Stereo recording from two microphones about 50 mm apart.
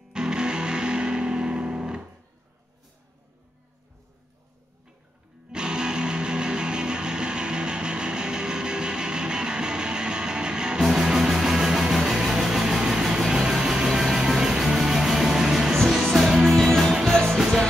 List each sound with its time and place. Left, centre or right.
0.1 s music: centre
5.5 s music: centre
16.5 s music: centre
17.4 s music: centre